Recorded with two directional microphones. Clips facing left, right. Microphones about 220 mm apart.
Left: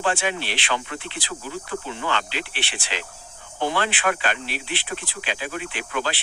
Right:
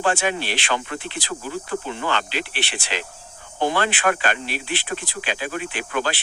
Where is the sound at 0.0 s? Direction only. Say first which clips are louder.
Right 2 dB; 45° right (ahead or behind).